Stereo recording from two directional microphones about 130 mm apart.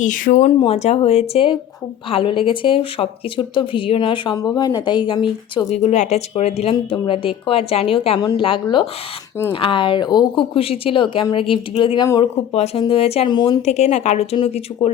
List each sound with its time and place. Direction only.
0.0 s speech: 75° left (ahead or behind)
0.4 s a woman's voice: 50° left (ahead or behind); by 5.6 s 35° left (ahead or behind)
5.7 s speech: 60° left (ahead or behind)
6.7 s a woman's voice: 35° left (ahead or behind)
13.2 s speech: 35° left (ahead or behind)
13.6 s speech: 60° left (ahead or behind)
14.7 s speech: 30° left (ahead or behind)